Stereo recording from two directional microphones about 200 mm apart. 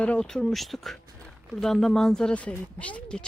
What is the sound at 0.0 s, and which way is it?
Speech, 5° left (ahead or behind).